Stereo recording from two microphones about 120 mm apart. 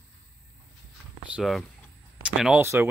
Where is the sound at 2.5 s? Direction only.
20° right (ahead or behind).